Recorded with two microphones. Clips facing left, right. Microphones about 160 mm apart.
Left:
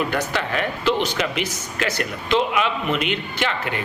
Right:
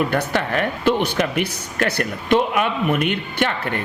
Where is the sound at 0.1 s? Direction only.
50° right (ahead or behind).